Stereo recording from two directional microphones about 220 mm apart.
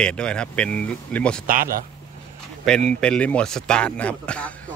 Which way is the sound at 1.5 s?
40° right (ahead or behind).